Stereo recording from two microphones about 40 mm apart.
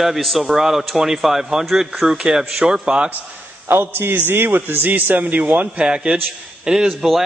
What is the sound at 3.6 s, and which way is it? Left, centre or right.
Speech, right.